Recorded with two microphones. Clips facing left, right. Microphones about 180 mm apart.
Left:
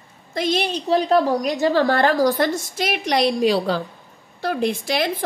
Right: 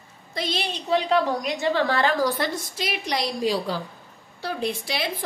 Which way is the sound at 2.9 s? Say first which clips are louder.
Left 8 dB; 70° left (ahead or behind).